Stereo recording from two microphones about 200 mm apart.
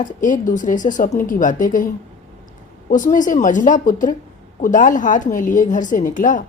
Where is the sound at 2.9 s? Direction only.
40° left (ahead or behind).